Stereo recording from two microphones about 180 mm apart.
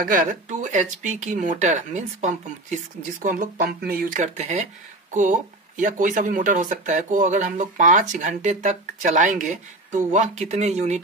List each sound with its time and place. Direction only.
0.0 s speech: 50° right (ahead or behind)